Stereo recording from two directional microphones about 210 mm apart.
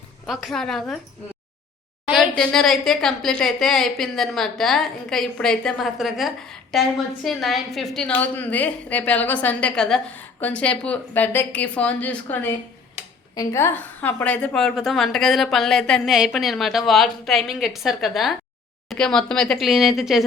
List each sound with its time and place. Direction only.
0.3 s a woman's voice: centre (ahead or behind)
2.1 s a woman's voice: 5° left (ahead or behind)